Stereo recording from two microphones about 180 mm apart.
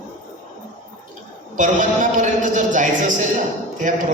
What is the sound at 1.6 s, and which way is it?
A man's voice, 45° right (ahead or behind).